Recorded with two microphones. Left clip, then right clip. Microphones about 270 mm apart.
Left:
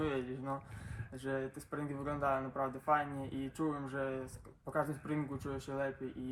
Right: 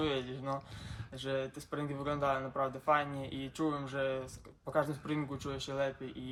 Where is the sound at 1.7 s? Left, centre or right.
Centre.